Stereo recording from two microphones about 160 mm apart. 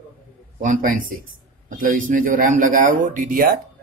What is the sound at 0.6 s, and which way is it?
Speech, 55° right (ahead or behind).